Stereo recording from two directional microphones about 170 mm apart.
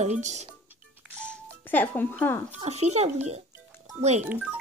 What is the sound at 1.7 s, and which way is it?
Speech, 10° left (ahead or behind).